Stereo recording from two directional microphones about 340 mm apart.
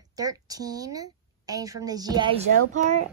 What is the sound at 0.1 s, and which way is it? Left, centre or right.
A woman's voice, centre.